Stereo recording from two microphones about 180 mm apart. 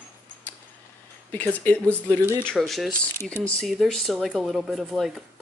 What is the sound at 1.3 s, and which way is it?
Speech, 10° left (ahead or behind).